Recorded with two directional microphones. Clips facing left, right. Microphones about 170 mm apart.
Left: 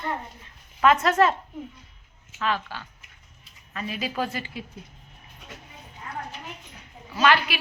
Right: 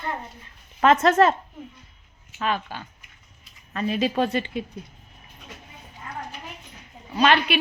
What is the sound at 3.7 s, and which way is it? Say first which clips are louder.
Speech: right 7 dB; 35° right (ahead or behind).